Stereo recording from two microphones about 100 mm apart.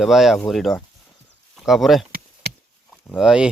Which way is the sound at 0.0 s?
Centre (ahead or behind).